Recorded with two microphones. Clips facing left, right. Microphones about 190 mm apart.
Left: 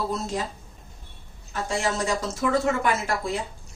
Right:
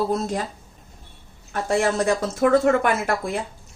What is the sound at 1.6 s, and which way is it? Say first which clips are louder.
Speech: right 6 dB; 55° right (ahead or behind).